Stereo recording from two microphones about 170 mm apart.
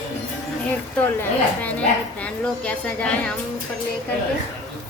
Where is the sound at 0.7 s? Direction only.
10° left (ahead or behind).